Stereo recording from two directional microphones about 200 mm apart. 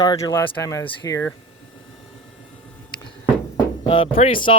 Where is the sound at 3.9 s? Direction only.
25° left (ahead or behind).